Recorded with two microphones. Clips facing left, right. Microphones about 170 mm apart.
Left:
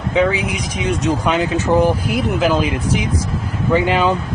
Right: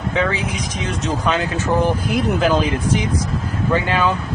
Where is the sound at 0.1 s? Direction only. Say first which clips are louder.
Left 5 dB; 15° left (ahead or behind).